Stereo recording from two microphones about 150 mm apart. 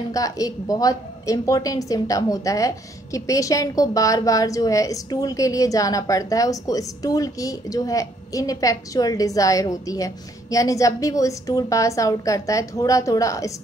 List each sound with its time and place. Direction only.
0.1 s a woman's voice: 25° left (ahead or behind)